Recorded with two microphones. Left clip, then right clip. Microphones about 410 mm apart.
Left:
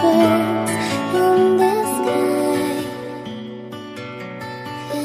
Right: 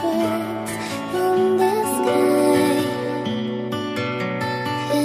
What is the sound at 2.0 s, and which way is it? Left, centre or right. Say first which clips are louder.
Music: right 1 dB; centre.